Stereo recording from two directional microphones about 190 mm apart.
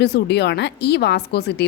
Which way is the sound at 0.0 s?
60° left (ahead or behind).